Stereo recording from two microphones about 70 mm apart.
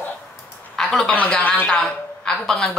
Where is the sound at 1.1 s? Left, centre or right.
Left.